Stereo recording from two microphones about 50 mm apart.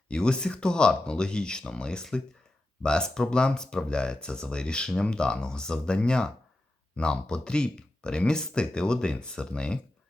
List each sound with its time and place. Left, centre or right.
0.1 s speech: centre